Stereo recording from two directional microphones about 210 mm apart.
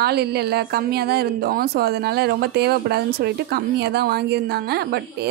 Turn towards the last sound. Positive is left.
turn(degrees=-50)  # may be behind; listen again after turning